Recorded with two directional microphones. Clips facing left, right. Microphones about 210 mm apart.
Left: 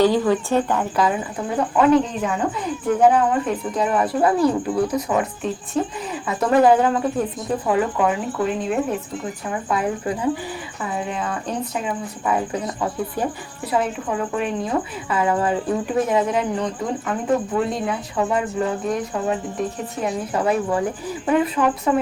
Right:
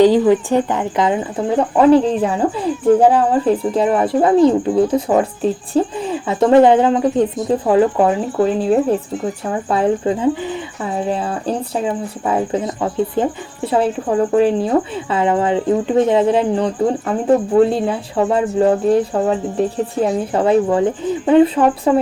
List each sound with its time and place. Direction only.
0.0 s speech: 15° right (ahead or behind)